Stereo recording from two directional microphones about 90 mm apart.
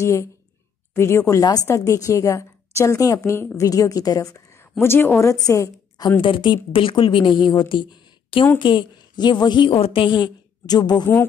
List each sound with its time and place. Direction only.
0.0 s a woman's voice: 35° left (ahead or behind)
4.7 s a woman's voice: 25° left (ahead or behind)
6.2 s a woman's voice: 65° left (ahead or behind); by 10.1 s 85° left
10.7 s speech: 50° left (ahead or behind)